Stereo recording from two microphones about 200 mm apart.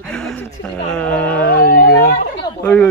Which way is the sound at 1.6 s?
45° left (ahead or behind).